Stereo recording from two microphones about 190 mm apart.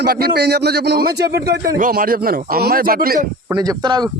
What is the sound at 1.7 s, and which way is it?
A man's voice, 45° right (ahead or behind).